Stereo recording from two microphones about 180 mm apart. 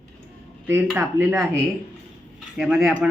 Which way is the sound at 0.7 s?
15° right (ahead or behind).